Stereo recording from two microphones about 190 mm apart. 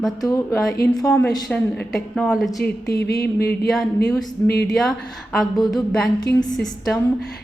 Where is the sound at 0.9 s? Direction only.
5° left (ahead or behind).